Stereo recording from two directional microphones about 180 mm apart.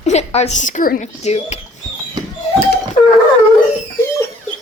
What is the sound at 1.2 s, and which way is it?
Speech, 35° left (ahead or behind).